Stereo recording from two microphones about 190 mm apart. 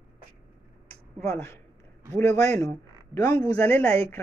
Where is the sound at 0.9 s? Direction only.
10° left (ahead or behind).